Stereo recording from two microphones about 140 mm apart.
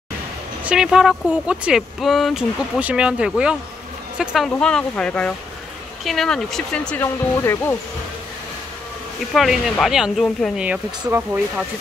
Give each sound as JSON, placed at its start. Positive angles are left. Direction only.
{"t": 0.7, "sound": "speech", "side_deg": -5}
{"t": 4.5, "sound": "speech", "side_deg": 5}
{"t": 7.0, "sound": "speech", "side_deg": 20}
{"t": 9.3, "sound": "speech", "side_deg": 0}
{"t": 10.6, "sound": "speech", "side_deg": -10}